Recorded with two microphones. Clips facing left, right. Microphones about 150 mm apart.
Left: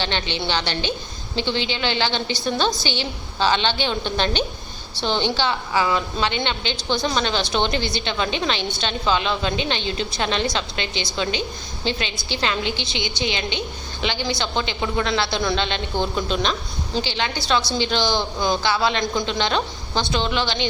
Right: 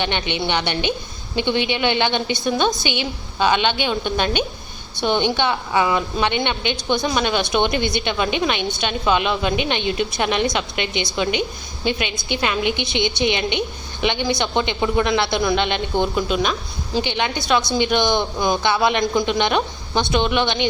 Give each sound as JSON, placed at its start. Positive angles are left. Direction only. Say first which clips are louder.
{"t": 0.0, "sound": "a woman's voice", "louder": "right 3 dB", "side_deg": -20}